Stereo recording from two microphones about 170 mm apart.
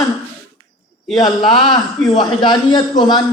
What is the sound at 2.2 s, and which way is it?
A man's voice, 25° left (ahead or behind).